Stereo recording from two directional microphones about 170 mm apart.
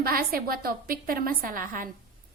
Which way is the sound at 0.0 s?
60° right (ahead or behind).